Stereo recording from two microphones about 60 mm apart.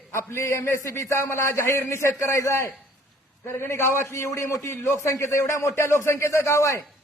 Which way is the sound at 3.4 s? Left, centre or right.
Left.